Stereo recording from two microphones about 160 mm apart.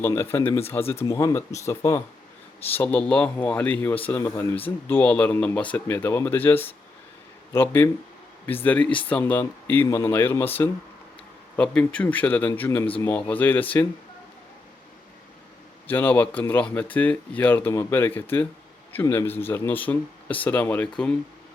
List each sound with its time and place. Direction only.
0.0 s speech: 15° left (ahead or behind)
15.9 s speech: 10° left (ahead or behind)